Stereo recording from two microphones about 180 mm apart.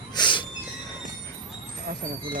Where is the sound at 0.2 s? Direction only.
25° left (ahead or behind).